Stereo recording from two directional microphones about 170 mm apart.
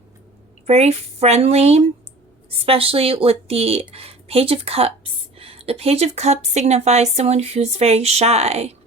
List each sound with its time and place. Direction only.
0.7 s speech: 40° right (ahead or behind)